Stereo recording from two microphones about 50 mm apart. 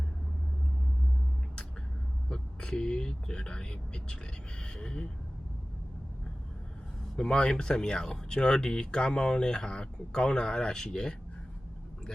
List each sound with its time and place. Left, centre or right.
2.3 s speech: centre
7.2 s speech: centre